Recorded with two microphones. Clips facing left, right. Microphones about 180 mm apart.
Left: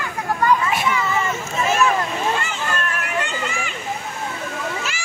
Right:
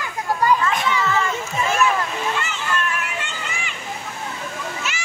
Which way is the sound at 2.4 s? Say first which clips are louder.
Even; 35° left (ahead or behind).